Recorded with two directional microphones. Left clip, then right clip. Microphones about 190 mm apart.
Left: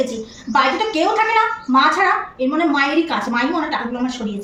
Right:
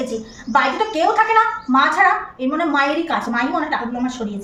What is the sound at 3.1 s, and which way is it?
A woman's voice, 25° right (ahead or behind).